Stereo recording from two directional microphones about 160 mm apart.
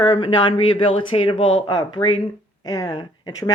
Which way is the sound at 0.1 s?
30° left (ahead or behind).